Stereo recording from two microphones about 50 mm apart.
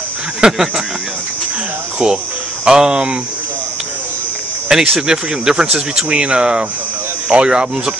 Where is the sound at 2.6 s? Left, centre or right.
Centre.